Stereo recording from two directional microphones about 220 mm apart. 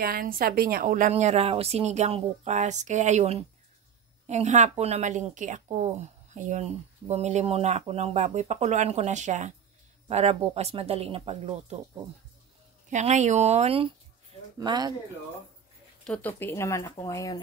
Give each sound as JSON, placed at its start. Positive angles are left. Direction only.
{"t": 0.0, "sound": "a woman's voice", "side_deg": -40}
{"t": 12.9, "sound": "a woman's voice", "side_deg": -35}
{"t": 16.0, "sound": "speech", "side_deg": 5}